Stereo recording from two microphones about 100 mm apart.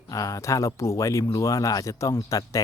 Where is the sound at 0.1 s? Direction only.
35° left (ahead or behind).